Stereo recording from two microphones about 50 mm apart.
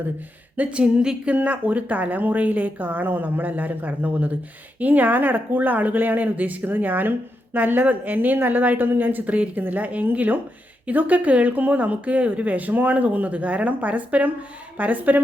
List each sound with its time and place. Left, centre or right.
0.5 s speech: right
1.4 s speech: right